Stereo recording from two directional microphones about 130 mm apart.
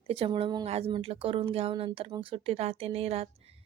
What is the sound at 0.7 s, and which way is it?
A woman's voice, 50° right (ahead or behind).